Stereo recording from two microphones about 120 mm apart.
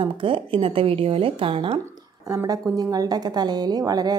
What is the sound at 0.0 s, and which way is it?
A woman's voice, 45° right (ahead or behind).